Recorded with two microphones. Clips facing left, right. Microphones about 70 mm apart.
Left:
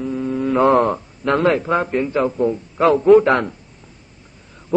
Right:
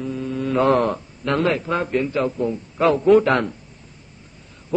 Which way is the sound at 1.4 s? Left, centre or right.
Left.